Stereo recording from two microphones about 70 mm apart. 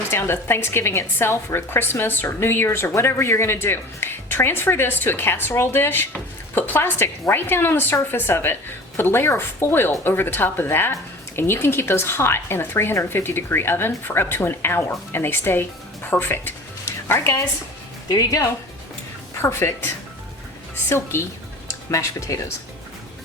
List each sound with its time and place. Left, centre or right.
0.1 s a woman's voice: left
18.1 s speech: left
19.4 s a woman's voice: left
20.9 s a woman's voice: left
21.8 s speech: left